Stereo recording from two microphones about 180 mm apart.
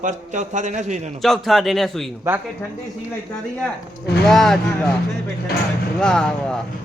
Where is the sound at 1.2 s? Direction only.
Centre (ahead or behind).